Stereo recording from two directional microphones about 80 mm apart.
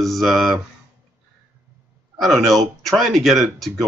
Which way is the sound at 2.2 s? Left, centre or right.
Centre.